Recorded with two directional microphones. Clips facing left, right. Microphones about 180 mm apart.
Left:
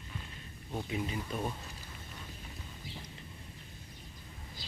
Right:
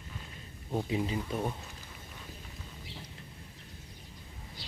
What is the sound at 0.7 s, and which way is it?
Speech, 25° right (ahead or behind).